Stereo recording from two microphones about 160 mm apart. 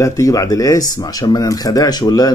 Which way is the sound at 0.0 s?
20° left (ahead or behind).